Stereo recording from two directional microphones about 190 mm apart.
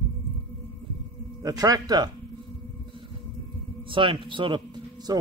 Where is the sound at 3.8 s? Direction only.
25° right (ahead or behind).